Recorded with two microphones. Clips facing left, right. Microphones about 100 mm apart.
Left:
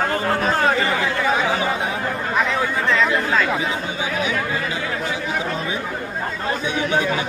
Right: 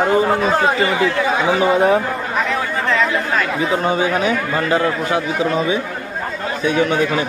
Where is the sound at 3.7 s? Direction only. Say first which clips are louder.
Right 7 dB; 60° right (ahead or behind).